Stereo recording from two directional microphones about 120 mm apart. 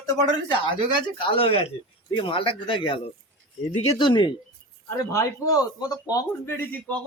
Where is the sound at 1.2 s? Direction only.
50° left (ahead or behind).